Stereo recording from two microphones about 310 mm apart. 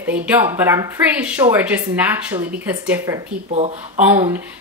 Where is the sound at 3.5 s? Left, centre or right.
Right.